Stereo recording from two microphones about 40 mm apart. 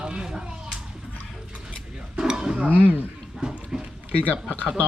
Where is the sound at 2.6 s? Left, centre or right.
Right.